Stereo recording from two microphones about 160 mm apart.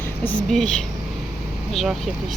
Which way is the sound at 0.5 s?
5° left (ahead or behind).